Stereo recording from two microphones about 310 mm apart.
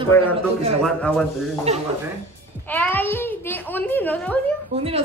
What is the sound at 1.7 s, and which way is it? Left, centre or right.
Speech, right.